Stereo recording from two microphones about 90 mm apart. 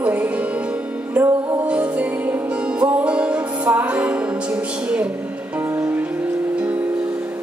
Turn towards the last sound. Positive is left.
turn(degrees=-20)  # may be behind; listen again after turning